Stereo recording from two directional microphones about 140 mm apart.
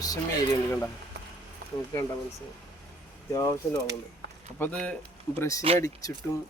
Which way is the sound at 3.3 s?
25° left (ahead or behind).